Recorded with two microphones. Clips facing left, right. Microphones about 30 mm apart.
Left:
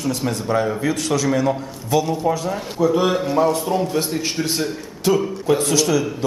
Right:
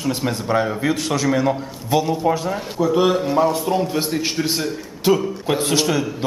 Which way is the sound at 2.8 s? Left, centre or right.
Centre.